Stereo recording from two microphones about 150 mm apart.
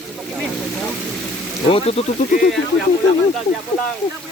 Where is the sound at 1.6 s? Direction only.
35° left (ahead or behind).